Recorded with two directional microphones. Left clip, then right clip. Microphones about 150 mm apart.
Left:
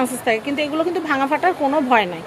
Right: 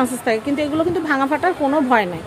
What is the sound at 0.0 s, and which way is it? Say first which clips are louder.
Speech: even; 50° right (ahead or behind).